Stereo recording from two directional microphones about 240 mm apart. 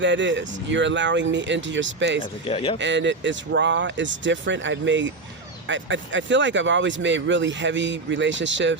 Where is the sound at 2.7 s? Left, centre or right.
Right.